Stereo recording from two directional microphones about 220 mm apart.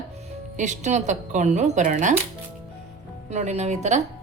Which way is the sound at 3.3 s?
30° right (ahead or behind).